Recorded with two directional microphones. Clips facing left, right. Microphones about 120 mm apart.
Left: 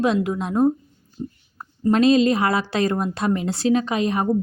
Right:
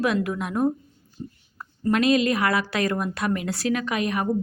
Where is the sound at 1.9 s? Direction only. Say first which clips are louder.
Left 4 dB; 30° left (ahead or behind).